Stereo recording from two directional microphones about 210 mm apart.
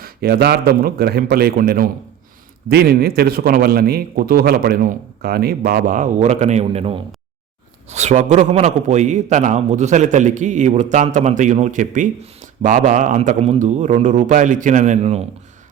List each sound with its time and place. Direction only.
0.0 s a man's voice: 50° right (ahead or behind); by 15.2 s 30° right (ahead or behind)